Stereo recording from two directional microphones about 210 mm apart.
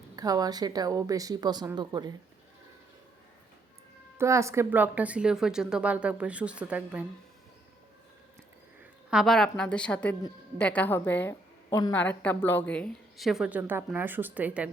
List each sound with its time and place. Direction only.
0.2 s a woman's voice: 15° right (ahead or behind)
4.2 s a woman's voice: 15° right (ahead or behind)
9.0 s a woman's voice: centre (ahead or behind)